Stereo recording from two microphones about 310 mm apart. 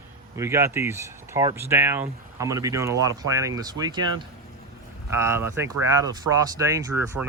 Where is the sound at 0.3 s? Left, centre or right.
Centre.